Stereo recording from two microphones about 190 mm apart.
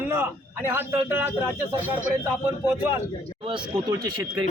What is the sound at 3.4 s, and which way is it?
Speech, 25° right (ahead or behind).